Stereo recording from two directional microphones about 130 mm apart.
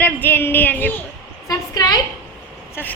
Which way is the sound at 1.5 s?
30° left (ahead or behind).